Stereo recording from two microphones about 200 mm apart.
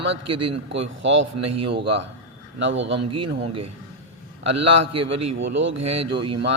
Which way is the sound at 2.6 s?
65° right (ahead or behind).